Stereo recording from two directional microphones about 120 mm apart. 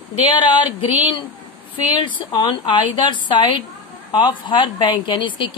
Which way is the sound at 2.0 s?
40° left (ahead or behind).